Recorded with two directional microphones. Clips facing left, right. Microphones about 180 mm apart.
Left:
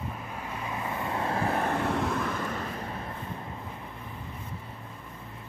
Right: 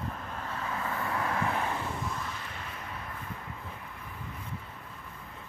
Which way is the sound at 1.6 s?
55° left (ahead or behind).